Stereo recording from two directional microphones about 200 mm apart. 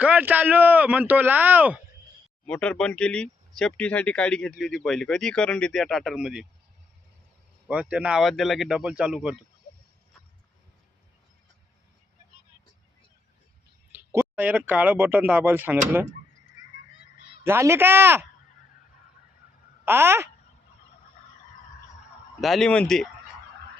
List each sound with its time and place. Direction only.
0.0 s speech: 10° right (ahead or behind)
2.5 s speech: 5° left (ahead or behind)
7.7 s speech: 5° right (ahead or behind)
13.9 s speech: 10° right (ahead or behind)
17.4 s speech: 10° right (ahead or behind)
19.8 s speech: 10° right (ahead or behind)
22.4 s speech: centre (ahead or behind)